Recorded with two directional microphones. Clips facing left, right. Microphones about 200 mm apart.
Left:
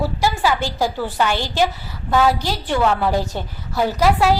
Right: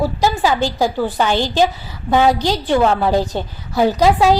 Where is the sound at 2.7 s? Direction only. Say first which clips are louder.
Right 3 dB; 30° right (ahead or behind).